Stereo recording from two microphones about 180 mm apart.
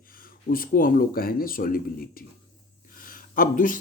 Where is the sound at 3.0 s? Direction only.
50° left (ahead or behind).